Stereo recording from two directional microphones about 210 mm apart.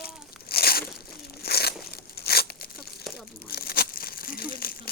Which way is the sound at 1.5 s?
50° left (ahead or behind).